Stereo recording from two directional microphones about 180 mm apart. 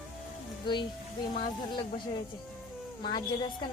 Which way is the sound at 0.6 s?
25° left (ahead or behind).